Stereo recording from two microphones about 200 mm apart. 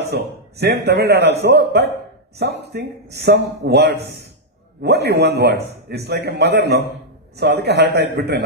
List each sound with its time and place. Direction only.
0.0 s a man's voice: 55° right (ahead or behind)